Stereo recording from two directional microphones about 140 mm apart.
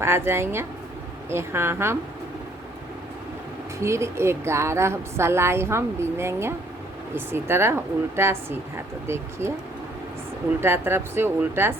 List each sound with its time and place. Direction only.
0.0 s a woman's voice: 20° right (ahead or behind)
3.8 s a woman's voice: 20° right (ahead or behind)
10.6 s a woman's voice: 15° right (ahead or behind)